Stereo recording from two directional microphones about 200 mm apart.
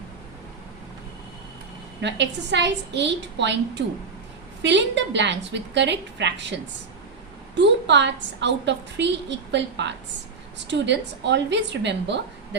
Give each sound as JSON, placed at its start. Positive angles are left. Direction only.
{"t": 2.0, "sound": "a woman's voice", "side_deg": -60}
{"t": 7.5, "sound": "a woman's voice", "side_deg": -60}